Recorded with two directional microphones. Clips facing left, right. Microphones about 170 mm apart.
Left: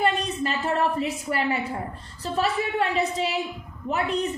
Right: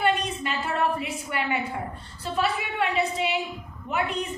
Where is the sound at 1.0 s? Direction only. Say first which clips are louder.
Left 4 dB; 35° left (ahead or behind).